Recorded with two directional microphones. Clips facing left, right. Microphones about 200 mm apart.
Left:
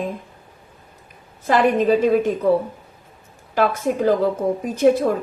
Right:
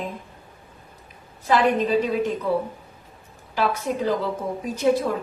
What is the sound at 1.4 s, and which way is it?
Speech, 50° left (ahead or behind).